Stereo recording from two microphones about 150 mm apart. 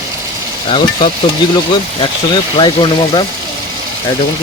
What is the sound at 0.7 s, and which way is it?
Speech, 30° left (ahead or behind).